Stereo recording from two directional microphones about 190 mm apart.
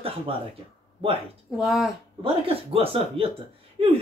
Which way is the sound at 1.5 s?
Centre (ahead or behind).